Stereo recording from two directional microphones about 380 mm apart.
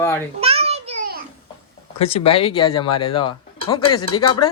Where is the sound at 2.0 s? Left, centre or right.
Centre.